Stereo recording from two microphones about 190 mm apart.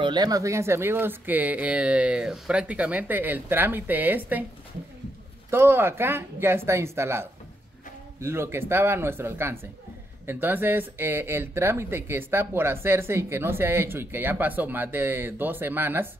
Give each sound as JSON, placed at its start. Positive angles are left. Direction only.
{"t": 0.0, "sound": "speech", "side_deg": -20}
{"t": 5.5, "sound": "speech", "side_deg": -15}